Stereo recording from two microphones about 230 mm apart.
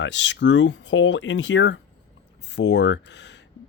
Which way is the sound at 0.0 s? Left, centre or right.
Left.